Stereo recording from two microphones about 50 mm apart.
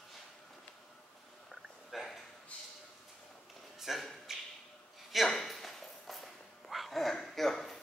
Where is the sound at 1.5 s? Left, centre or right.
Centre.